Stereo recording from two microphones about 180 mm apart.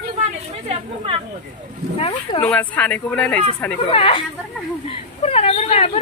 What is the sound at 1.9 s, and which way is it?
Speech, 35° left (ahead or behind).